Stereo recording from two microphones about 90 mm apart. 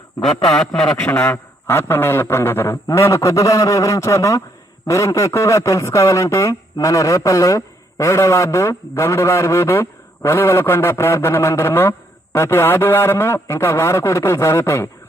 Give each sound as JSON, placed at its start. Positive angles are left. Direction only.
{"t": 0.5, "sound": "speech", "side_deg": 5}
{"t": 1.0, "sound": "a man's voice", "side_deg": 25}